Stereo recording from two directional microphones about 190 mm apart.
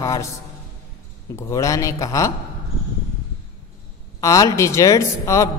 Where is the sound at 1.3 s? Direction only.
15° left (ahead or behind).